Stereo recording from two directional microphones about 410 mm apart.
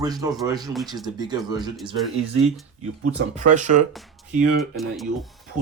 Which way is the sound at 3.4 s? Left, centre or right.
Centre.